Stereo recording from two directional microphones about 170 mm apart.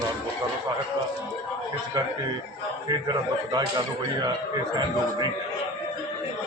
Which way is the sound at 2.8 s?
25° right (ahead or behind).